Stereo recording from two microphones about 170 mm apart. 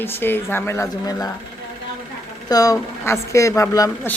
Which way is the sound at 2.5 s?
20° left (ahead or behind).